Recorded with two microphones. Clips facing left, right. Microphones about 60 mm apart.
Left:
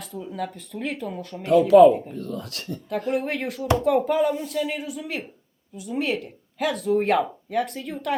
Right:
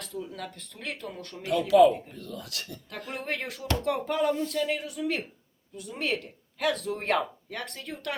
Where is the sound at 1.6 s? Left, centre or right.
Left.